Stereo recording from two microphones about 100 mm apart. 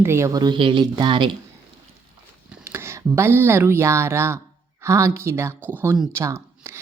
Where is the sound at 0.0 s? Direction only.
25° right (ahead or behind).